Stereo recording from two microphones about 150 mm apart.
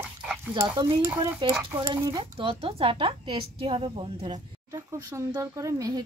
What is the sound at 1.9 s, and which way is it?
A woman's voice, 30° right (ahead or behind).